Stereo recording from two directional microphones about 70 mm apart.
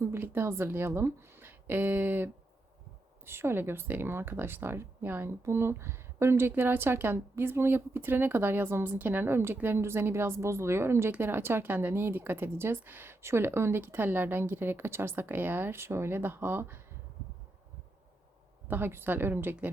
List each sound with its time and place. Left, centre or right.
0.0 s a woman's voice: right
18.7 s a woman's voice: right